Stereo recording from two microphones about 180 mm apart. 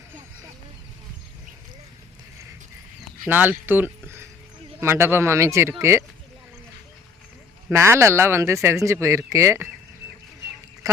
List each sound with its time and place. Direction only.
3.2 s speech: 10° right (ahead or behind)
7.7 s speech: 15° right (ahead or behind)